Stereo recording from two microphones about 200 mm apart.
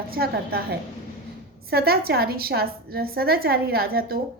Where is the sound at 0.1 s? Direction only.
50° right (ahead or behind).